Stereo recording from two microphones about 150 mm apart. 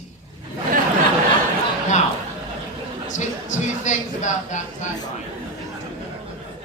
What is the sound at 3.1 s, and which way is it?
Speech, 55° left (ahead or behind).